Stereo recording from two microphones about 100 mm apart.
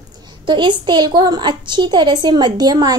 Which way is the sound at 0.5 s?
50° right (ahead or behind).